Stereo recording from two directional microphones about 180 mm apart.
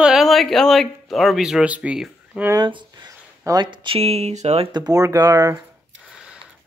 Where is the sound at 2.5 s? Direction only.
25° right (ahead or behind).